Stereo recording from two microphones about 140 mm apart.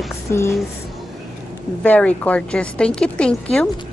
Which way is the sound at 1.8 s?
10° left (ahead or behind).